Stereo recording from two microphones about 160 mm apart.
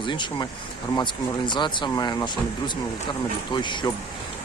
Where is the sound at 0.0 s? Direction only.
30° left (ahead or behind).